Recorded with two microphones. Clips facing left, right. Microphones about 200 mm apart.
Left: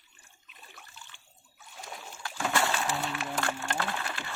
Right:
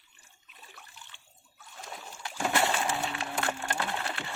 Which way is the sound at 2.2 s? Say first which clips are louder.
Right 1 dB; 20° right (ahead or behind).